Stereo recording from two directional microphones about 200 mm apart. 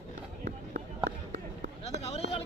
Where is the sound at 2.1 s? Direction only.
30° left (ahead or behind).